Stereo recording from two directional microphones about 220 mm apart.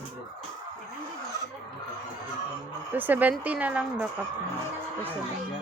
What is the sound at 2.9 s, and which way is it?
Speech, 10° right (ahead or behind).